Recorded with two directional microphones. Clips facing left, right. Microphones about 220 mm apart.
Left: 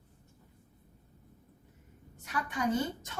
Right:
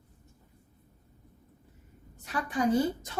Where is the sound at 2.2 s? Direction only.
35° right (ahead or behind).